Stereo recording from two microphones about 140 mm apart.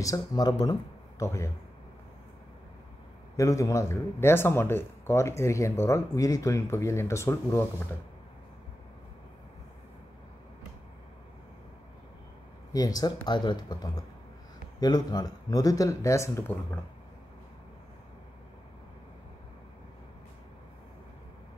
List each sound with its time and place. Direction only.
0.0 s speech: 25° left (ahead or behind)
3.3 s speech: 20° left (ahead or behind)
12.7 s speech: 25° left (ahead or behind)